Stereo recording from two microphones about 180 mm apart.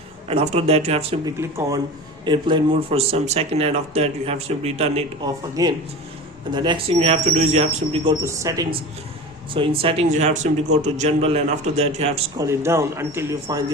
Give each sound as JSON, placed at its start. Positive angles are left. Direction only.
{"t": 0.3, "sound": "speech", "side_deg": -35}
{"t": 1.2, "sound": "speech", "side_deg": -15}
{"t": 5.2, "sound": "speech", "side_deg": -20}
{"t": 8.2, "sound": "speech", "side_deg": -15}
{"t": 9.5, "sound": "speech", "side_deg": -30}
{"t": 12.4, "sound": "speech", "side_deg": -15}